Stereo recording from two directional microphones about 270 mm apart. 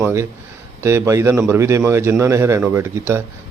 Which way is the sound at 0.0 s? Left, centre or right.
Centre.